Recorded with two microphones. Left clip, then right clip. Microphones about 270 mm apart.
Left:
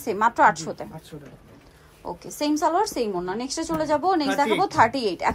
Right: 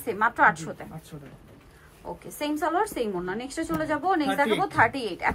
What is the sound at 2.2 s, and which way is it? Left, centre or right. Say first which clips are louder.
A woman's voice: left 5 dB; centre.